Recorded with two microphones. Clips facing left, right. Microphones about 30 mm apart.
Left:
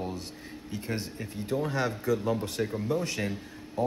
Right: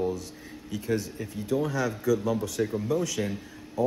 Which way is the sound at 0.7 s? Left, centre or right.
Left.